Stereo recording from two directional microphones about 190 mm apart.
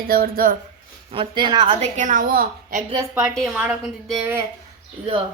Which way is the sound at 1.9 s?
40° right (ahead or behind).